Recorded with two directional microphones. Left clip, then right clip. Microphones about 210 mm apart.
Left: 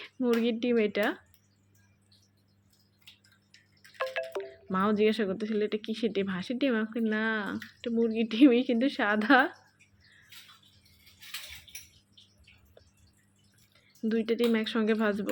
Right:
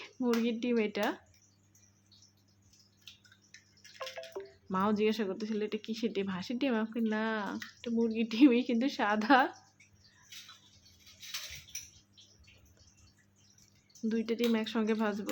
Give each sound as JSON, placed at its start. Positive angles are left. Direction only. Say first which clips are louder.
{"t": 0.3, "sound": "speech", "louder": "left 4 dB", "side_deg": 15}
{"t": 3.9, "sound": "drip", "louder": "left 10 dB", "side_deg": 45}
{"t": 4.4, "sound": "speech", "louder": "even", "side_deg": 15}
{"t": 14.1, "sound": "speech", "louder": "left 5 dB", "side_deg": 15}